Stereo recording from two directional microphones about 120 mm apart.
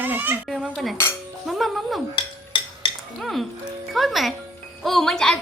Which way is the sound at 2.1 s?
45° left (ahead or behind).